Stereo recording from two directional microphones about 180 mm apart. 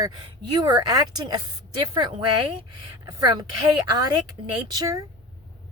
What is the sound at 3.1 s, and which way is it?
Speech, 20° right (ahead or behind).